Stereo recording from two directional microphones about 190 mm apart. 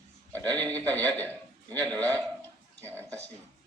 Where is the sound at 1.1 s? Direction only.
10° left (ahead or behind).